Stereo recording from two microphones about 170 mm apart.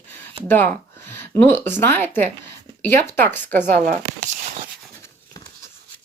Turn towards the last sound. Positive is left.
turn(degrees=-45)  # may be behind; listen again after turning